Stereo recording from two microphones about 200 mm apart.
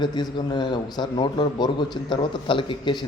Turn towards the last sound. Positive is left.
turn(degrees=25)  # may be behind; listen again after turning